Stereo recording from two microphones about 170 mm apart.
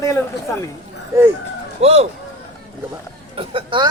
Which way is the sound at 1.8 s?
35° right (ahead or behind).